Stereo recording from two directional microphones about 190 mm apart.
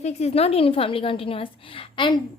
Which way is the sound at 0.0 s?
35° left (ahead or behind).